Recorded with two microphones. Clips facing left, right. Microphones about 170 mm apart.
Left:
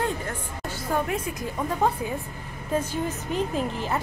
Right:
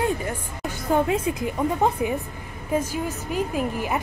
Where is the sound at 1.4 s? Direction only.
20° right (ahead or behind).